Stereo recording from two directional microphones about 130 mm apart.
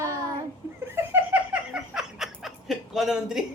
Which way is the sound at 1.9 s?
5° right (ahead or behind).